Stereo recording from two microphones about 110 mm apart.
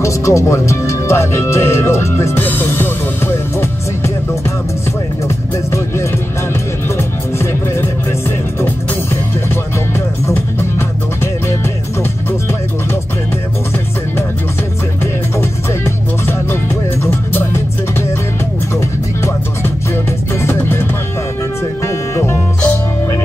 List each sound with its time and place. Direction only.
0.0 s speech: 25° left (ahead or behind)
7.0 s music: 25° left (ahead or behind)
15.3 s music: 25° left (ahead or behind)
20.3 s music: 25° left (ahead or behind)
21.8 s music: 25° left (ahead or behind)